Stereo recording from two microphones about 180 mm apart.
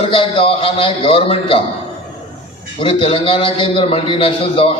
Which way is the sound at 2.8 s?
30° left (ahead or behind).